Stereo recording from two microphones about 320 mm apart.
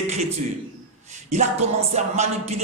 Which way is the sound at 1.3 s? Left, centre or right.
Right.